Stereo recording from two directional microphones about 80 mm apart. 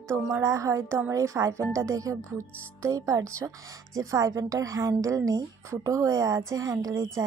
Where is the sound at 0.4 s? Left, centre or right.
Right.